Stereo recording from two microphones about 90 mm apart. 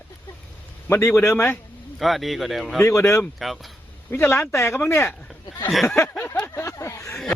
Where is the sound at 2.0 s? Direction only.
Centre (ahead or behind).